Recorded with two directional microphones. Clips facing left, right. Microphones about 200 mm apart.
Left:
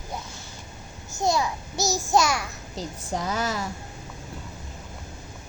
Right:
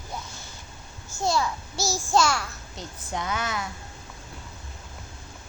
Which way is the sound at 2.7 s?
35° left (ahead or behind).